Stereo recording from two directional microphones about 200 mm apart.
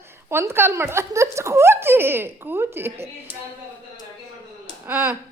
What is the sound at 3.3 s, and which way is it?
Speech, 25° left (ahead or behind).